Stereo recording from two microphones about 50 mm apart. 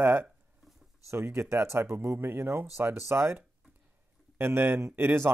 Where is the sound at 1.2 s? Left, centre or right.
Right.